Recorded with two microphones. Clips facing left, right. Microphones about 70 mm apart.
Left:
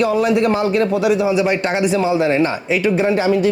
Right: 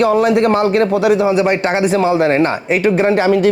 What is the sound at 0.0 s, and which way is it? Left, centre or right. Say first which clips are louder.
Speech: right 3 dB; right.